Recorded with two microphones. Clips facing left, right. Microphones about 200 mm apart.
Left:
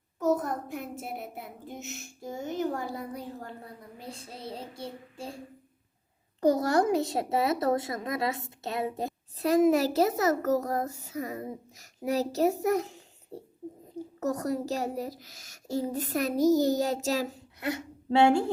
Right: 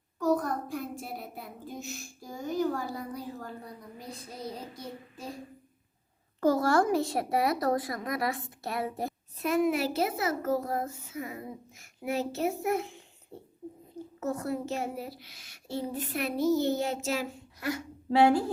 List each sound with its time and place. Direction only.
0.2 s a child's voice: 20° left (ahead or behind)
6.4 s a child's voice: 20° left (ahead or behind)
9.4 s a child's voice: 40° left (ahead or behind)
17.6 s a woman's voice: 25° left (ahead or behind)